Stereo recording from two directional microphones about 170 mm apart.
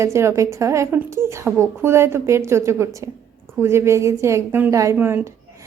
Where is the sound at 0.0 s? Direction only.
15° right (ahead or behind).